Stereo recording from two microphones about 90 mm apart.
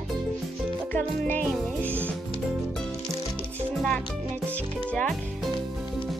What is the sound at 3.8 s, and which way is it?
Speech, 10° left (ahead or behind).